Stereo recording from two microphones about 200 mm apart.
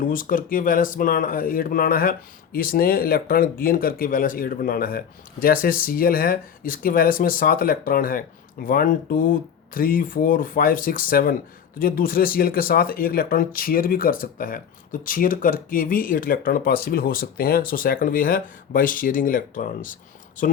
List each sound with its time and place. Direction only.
0.0 s speech: 45° left (ahead or behind)